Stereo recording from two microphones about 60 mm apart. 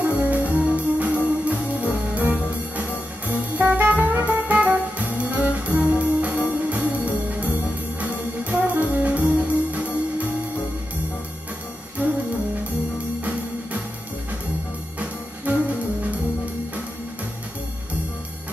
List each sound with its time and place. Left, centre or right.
0.0 s music: right
12.0 s music: right
15.0 s music: right